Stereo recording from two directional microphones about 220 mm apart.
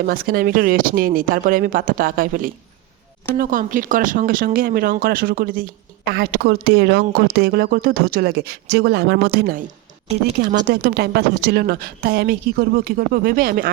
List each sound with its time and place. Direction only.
0.0 s speech: 40° right (ahead or behind)
10.1 s speech: 30° right (ahead or behind)
10.7 s speech: 45° right (ahead or behind)